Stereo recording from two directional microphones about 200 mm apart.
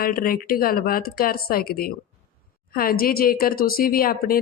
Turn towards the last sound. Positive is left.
turn(degrees=45)  # may be behind; listen again after turning